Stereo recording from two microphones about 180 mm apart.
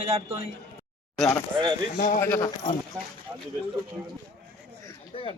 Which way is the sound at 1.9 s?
55° left (ahead or behind).